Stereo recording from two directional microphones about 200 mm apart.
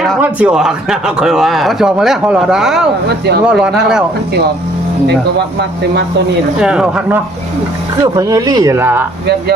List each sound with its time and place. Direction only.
0.0 s speech: 5° right (ahead or behind)
6.6 s speech: 5° right (ahead or behind)
8.0 s speech: 15° right (ahead or behind)